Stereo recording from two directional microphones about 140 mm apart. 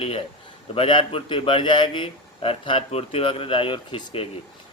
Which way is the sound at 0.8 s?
40° left (ahead or behind).